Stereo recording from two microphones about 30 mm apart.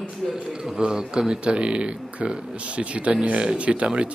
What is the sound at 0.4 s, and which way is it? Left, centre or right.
A man's voice, right.